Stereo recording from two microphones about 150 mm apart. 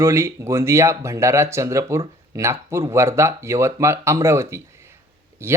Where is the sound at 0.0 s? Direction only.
20° right (ahead or behind).